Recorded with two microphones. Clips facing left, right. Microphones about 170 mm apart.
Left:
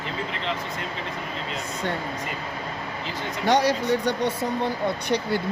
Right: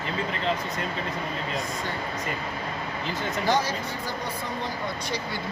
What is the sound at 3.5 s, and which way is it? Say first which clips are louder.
Speech: left 7 dB; 70° left (ahead or behind).